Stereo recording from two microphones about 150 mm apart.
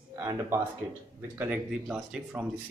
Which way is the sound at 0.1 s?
20° right (ahead or behind).